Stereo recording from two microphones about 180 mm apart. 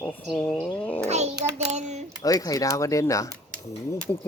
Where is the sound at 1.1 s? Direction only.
35° right (ahead or behind).